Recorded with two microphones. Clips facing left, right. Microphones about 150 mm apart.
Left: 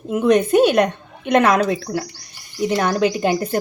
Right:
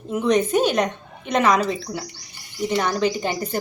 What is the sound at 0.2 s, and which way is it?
A woman's voice, 60° left (ahead or behind).